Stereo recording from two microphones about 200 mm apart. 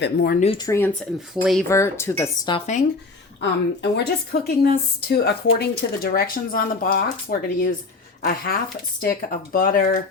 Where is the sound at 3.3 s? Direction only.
55° left (ahead or behind).